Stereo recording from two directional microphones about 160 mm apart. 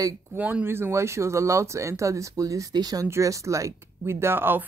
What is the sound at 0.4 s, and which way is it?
A woman's voice, 10° right (ahead or behind).